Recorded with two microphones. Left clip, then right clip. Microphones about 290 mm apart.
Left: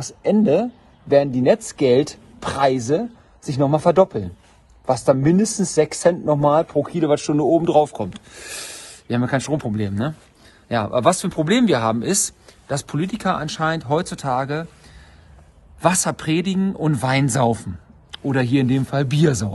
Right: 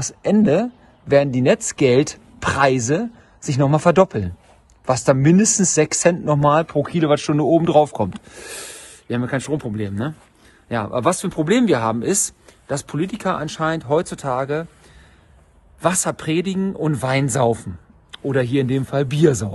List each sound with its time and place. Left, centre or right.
0.0 s speech: right; by 14.7 s centre
15.8 s speech: centre